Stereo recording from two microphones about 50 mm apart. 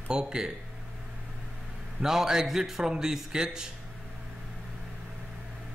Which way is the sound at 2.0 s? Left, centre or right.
Centre.